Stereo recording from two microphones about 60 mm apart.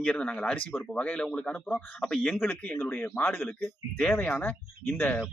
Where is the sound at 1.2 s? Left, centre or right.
Centre.